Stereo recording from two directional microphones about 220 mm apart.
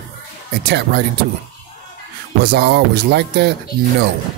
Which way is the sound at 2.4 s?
50° right (ahead or behind).